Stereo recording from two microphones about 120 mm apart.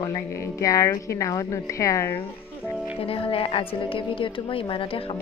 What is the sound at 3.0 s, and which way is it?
A woman's voice, 50° left (ahead or behind).